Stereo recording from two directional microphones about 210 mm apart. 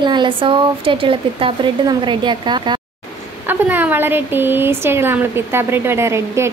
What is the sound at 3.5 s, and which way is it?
Speech, 10° right (ahead or behind).